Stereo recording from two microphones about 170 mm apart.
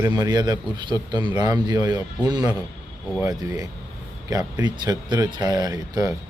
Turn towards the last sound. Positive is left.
turn(degrees=-20)  # may be behind; listen again after turning